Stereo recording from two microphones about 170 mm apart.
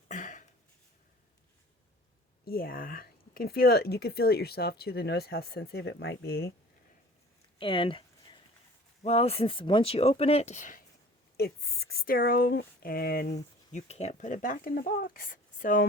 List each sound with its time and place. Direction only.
0.1 s a sound: 50° left (ahead or behind)
2.4 s speech: 60° left (ahead or behind)
7.6 s a sound: 30° left (ahead or behind)
9.0 s speech: 35° left (ahead or behind)
11.3 s speech: 65° left (ahead or behind)
13.7 s speech: 40° left (ahead or behind)